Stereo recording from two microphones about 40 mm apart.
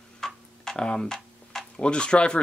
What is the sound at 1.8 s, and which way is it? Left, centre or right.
Speech, left.